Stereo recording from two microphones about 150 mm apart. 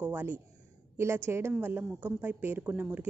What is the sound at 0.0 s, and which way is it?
A woman's voice, 15° right (ahead or behind).